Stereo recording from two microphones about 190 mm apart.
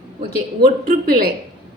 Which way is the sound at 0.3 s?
50° right (ahead or behind).